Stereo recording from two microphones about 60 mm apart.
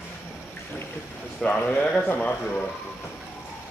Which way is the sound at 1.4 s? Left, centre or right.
Left.